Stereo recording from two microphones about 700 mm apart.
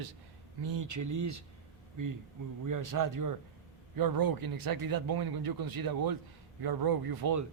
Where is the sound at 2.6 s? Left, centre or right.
Right.